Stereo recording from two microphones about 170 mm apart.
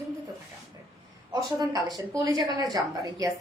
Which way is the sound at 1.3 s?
20° right (ahead or behind).